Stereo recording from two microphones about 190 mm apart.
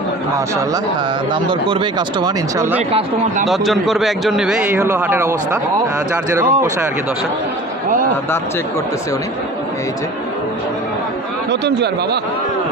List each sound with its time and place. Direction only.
1.3 s speech: 25° right (ahead or behind)
3.4 s a man's voice: centre (ahead or behind)
11.6 s speech: 60° right (ahead or behind)